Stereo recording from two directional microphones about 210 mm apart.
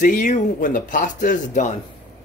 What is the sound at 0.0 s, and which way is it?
Speech, 40° left (ahead or behind).